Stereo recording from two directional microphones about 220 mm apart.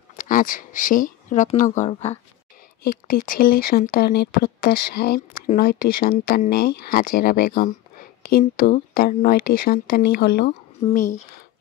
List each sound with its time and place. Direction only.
0.2 s speech: 40° left (ahead or behind)
2.8 s speech: 40° left (ahead or behind)
10.8 s speech: 30° left (ahead or behind)